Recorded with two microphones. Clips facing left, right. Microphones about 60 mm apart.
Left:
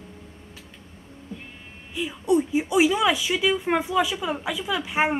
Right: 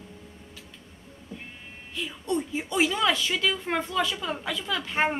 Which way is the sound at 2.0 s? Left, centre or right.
Centre.